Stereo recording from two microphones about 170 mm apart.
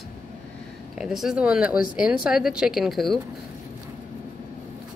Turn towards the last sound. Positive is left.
turn(degrees=0)  # may be behind; listen again after turning